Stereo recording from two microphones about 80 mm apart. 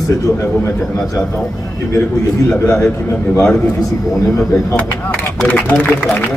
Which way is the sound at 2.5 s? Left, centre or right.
Centre.